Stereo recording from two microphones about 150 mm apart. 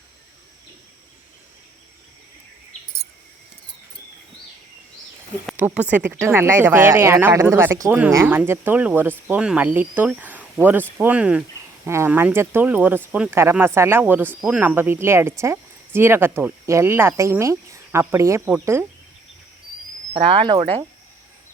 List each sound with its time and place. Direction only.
5.5 s speech: 10° right (ahead or behind)
20.1 s speech: 35° right (ahead or behind)